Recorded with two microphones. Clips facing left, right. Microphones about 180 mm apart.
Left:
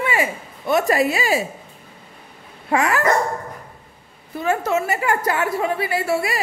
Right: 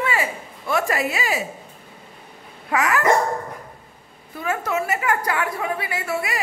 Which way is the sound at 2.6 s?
30° left (ahead or behind).